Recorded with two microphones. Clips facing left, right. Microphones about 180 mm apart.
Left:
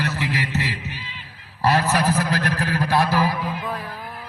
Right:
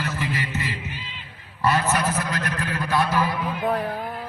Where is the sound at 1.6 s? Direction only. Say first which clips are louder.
Left 2 dB; 35° left (ahead or behind).